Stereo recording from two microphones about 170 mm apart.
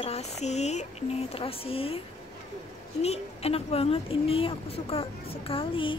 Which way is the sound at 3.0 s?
35° left (ahead or behind).